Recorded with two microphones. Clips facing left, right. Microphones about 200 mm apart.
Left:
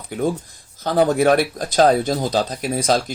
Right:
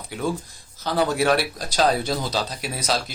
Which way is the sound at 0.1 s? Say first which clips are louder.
Left 5 dB; 50° left (ahead or behind).